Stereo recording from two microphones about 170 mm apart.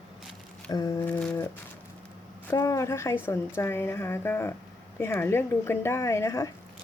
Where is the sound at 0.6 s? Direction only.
20° left (ahead or behind).